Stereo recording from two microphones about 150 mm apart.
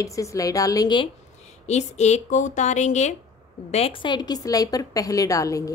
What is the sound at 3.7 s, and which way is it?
Speech, 40° left (ahead or behind).